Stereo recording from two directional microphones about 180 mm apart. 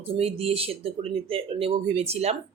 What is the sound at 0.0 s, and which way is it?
Speech, 35° right (ahead or behind).